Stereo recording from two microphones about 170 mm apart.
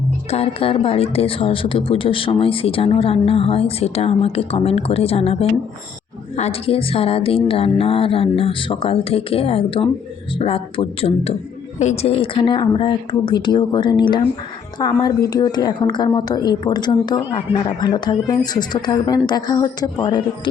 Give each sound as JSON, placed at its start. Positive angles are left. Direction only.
{"t": 0.3, "sound": "a woman's voice", "side_deg": 35}